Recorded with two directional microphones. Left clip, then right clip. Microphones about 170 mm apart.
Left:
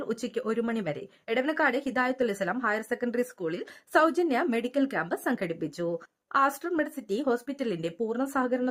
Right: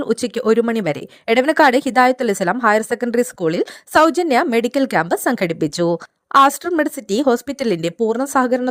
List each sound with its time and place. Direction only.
0.0 s speech: 45° right (ahead or behind)